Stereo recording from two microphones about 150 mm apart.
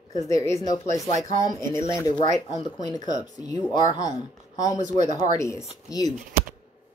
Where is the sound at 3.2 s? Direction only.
25° left (ahead or behind).